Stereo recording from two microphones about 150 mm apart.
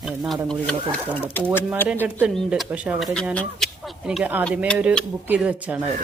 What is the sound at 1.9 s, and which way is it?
Speech, 10° right (ahead or behind).